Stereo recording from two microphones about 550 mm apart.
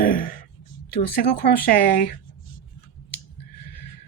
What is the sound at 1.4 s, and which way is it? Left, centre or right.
Speech, centre.